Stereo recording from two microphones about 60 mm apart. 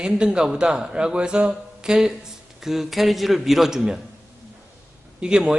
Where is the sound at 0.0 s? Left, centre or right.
Centre.